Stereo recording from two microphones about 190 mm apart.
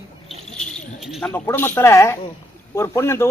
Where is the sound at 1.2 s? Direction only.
10° left (ahead or behind).